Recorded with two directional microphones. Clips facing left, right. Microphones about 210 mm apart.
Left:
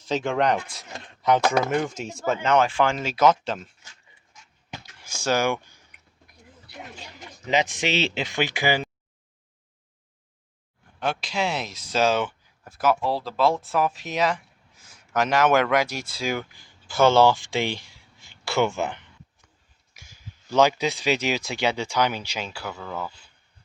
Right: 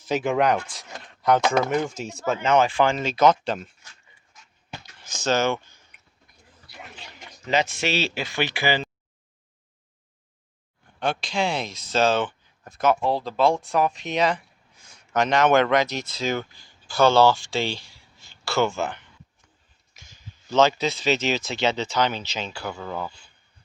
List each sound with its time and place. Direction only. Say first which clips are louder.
0.0 s speech: right 2 dB; 10° right (ahead or behind)
4.9 s a sound: right 1 dB; 10° left (ahead or behind)
7.4 s speech: even; 15° left (ahead or behind)
11.0 s speech: right 1 dB; 5° left (ahead or behind)
22.8 s speech: right 1 dB; 10° right (ahead or behind)